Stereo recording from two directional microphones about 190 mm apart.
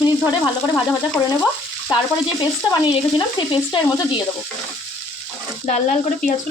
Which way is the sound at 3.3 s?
25° left (ahead or behind).